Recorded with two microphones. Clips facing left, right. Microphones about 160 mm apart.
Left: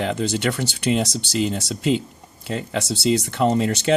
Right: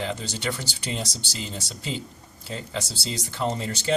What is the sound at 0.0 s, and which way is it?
Speech, 65° left (ahead or behind).